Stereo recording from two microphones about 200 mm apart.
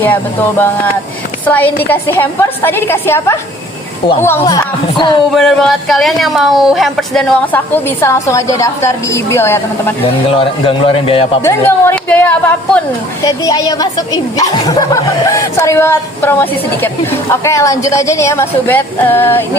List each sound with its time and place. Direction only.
1.5 s a woman's voice: 10° left (ahead or behind)
5.3 s speech: centre (ahead or behind)
10.2 s speech: 25° left (ahead or behind)
11.4 s a woman's voice: 10° left (ahead or behind)